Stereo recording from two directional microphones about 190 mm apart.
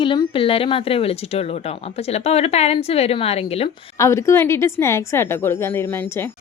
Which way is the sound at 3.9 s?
15° left (ahead or behind).